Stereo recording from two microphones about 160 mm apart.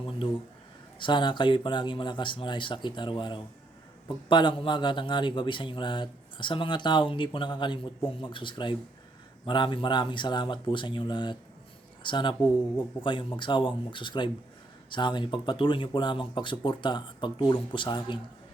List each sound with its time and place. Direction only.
0.9 s a man's voice: 30° left (ahead or behind)